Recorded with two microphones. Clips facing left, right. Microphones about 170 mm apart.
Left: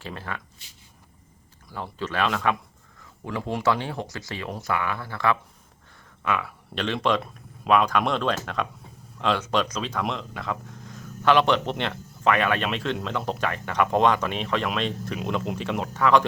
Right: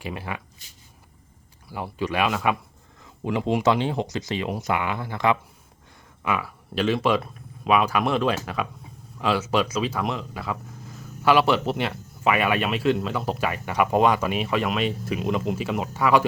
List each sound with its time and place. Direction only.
0.0 s speech: 15° right (ahead or behind)
1.7 s speech: 15° right (ahead or behind)
3.0 s speech: 20° right (ahead or behind)
6.2 s speech: 5° right (ahead or behind)